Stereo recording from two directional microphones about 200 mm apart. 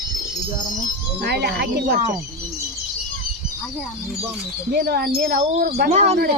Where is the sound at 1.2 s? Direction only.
55° right (ahead or behind).